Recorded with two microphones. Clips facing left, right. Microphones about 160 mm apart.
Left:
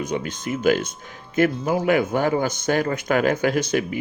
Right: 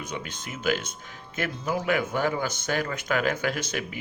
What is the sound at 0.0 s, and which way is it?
Speech, 45° left (ahead or behind).